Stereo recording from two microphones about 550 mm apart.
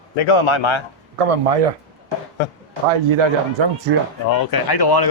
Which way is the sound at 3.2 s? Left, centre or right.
Right.